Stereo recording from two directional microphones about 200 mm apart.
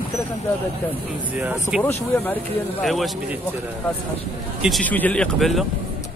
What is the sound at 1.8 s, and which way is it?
Speech, 10° left (ahead or behind).